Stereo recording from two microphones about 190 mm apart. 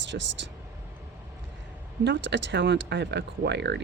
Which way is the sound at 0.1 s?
55° right (ahead or behind).